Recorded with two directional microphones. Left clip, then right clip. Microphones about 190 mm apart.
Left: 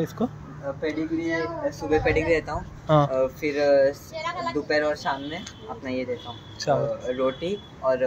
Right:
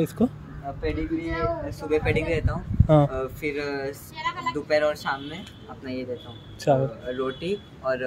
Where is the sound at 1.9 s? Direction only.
35° right (ahead or behind).